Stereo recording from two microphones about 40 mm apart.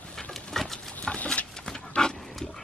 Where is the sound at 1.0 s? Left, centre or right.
Left.